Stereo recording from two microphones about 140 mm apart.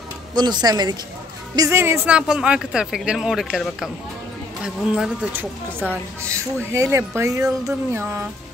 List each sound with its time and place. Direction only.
0.3 s speech: 30° right (ahead or behind)
2.1 s speech: 5° right (ahead or behind)
5.9 s speech: 20° right (ahead or behind)